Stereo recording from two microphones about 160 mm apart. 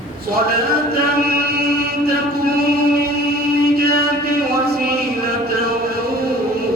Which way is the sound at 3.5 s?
70° right (ahead or behind).